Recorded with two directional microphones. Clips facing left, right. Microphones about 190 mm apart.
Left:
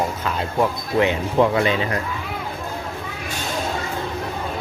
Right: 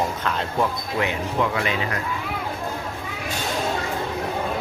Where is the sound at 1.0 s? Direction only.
30° left (ahead or behind).